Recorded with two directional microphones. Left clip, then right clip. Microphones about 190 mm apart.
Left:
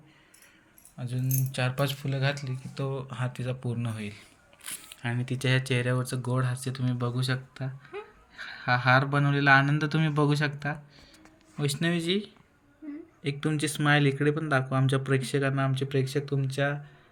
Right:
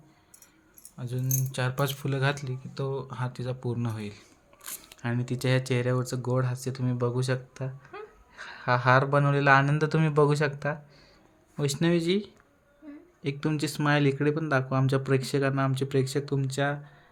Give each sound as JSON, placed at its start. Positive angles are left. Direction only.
{"t": 0.9, "sound": "speech", "side_deg": -15}
{"t": 2.7, "sound": "speech", "side_deg": -5}